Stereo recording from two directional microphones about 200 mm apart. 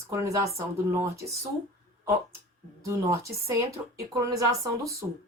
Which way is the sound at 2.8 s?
15° right (ahead or behind).